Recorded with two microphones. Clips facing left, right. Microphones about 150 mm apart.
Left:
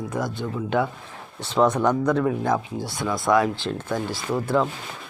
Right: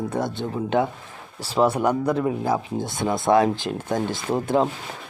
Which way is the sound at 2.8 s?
20° right (ahead or behind).